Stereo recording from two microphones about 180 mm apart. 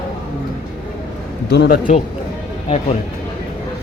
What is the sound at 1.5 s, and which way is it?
Speech, 70° left (ahead or behind).